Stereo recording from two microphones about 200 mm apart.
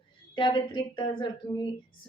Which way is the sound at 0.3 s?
25° left (ahead or behind).